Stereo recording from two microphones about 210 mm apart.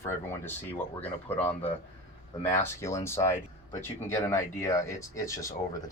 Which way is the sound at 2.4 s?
10° left (ahead or behind).